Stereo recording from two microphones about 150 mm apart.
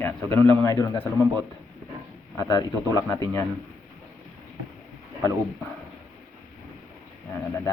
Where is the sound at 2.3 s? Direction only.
20° left (ahead or behind).